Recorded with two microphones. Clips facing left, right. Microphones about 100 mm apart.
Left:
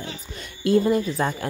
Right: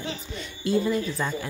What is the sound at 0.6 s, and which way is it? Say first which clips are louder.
Speech: left 5 dB; 50° left (ahead or behind).